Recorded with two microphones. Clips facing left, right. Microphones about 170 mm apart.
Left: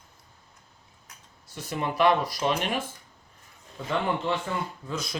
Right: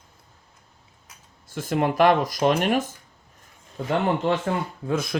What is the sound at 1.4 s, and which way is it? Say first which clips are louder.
Speech: right 7 dB; 50° right (ahead or behind).